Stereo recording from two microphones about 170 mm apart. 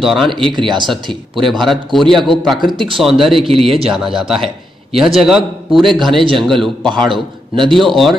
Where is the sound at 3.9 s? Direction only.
Centre (ahead or behind).